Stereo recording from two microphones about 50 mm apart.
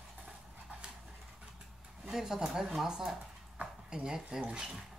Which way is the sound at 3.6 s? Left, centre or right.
Centre.